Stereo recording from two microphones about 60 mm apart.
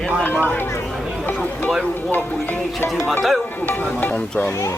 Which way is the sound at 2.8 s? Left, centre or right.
Centre.